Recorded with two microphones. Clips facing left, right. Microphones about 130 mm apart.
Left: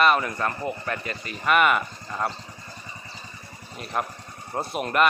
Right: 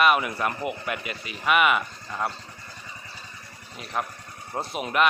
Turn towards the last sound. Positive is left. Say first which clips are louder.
# left 2 dB
turn(degrees=0)  # may be behind; listen again after turning